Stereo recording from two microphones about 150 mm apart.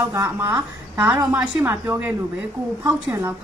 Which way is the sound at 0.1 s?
15° right (ahead or behind).